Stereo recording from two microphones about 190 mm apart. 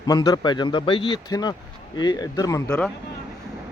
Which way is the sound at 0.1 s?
20° left (ahead or behind).